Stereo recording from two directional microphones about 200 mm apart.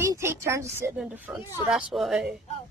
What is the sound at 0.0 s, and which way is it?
Speech, 15° right (ahead or behind).